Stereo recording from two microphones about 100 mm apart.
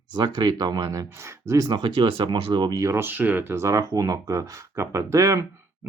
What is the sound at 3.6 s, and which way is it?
Speech, 35° right (ahead or behind).